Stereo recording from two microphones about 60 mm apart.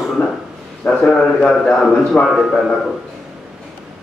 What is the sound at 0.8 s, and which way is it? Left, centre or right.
Speech, left.